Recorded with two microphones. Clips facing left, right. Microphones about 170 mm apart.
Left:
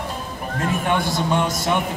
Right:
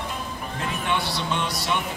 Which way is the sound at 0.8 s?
50° left (ahead or behind).